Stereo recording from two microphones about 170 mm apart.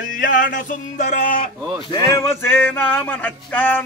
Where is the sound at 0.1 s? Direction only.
50° left (ahead or behind).